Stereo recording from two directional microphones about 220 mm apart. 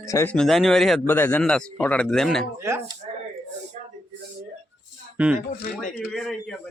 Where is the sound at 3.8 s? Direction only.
30° right (ahead or behind).